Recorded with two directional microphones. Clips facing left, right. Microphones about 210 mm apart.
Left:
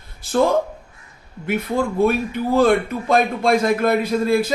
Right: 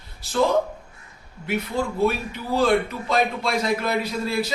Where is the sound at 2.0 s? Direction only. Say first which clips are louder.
Left 4 dB; 50° left (ahead or behind).